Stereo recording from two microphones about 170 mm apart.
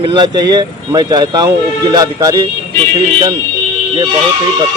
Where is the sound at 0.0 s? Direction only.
25° right (ahead or behind).